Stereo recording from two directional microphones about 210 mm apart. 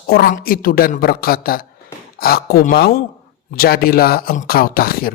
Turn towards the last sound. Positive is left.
turn(degrees=45)  # may be behind; listen again after turning